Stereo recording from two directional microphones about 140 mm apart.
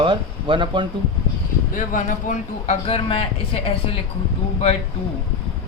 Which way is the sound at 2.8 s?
40° left (ahead or behind).